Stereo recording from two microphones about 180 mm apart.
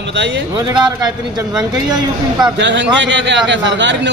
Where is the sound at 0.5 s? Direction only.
25° right (ahead or behind).